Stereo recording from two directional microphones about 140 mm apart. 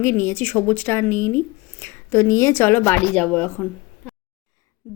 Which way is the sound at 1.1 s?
55° left (ahead or behind).